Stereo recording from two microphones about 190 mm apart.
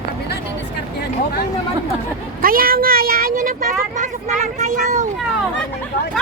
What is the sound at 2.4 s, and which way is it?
Speech, 50° right (ahead or behind).